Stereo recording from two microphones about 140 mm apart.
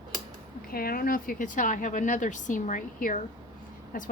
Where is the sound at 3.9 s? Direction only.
90° left.